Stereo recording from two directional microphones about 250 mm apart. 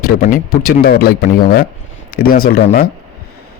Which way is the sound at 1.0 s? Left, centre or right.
Left.